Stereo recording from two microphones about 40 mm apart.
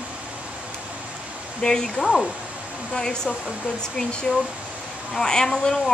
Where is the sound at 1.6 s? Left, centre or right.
Centre.